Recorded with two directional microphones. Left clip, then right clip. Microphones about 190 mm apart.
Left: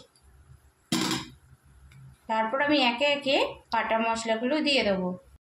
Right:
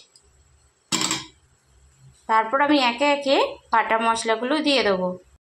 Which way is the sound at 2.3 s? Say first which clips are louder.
Right 6 dB; 15° right (ahead or behind).